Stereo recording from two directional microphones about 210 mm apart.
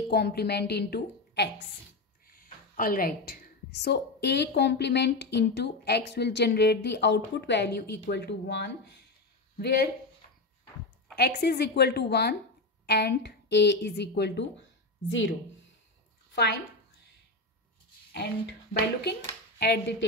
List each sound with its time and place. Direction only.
0.1 s a woman's voice: 50° left (ahead or behind)
2.2 s a sound: 45° left (ahead or behind)
3.8 s a woman's voice: 55° left (ahead or behind)
11.1 s a woman's voice: 50° left (ahead or behind)
18.1 s a woman's voice: 50° left (ahead or behind)